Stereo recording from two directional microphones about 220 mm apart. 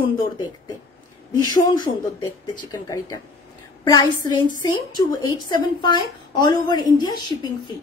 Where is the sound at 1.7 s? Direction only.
15° left (ahead or behind).